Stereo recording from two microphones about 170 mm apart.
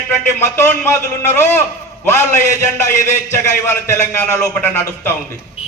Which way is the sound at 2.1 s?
15° left (ahead or behind).